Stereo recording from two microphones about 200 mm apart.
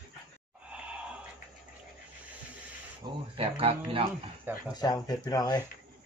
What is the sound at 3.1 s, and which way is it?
Speech, 20° right (ahead or behind).